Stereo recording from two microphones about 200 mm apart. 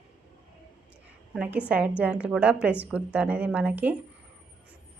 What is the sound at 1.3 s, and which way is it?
A woman's voice, 5° right (ahead or behind).